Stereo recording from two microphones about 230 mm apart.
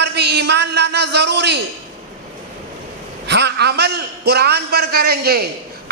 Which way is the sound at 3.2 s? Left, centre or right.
Right.